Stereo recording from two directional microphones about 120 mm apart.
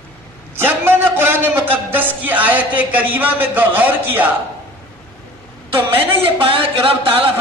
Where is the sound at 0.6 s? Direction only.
20° right (ahead or behind).